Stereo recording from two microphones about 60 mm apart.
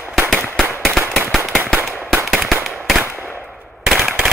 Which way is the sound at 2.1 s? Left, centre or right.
Centre.